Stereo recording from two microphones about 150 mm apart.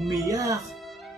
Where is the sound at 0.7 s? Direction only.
Centre (ahead or behind).